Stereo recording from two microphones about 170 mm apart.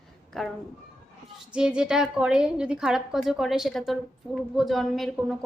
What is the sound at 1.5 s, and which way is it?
A woman's voice, 5° right (ahead or behind).